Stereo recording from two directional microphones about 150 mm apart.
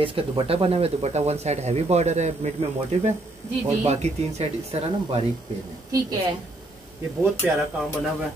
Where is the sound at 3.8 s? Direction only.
45° right (ahead or behind).